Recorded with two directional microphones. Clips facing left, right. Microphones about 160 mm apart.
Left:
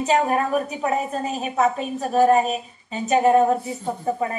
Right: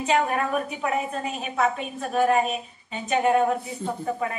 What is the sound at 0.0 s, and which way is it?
A woman's voice, 35° left (ahead or behind).